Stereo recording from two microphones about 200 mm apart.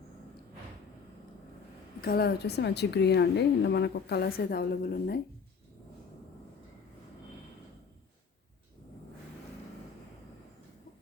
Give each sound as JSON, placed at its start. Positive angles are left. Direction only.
{"t": 2.0, "sound": "a woman's voice", "side_deg": 50}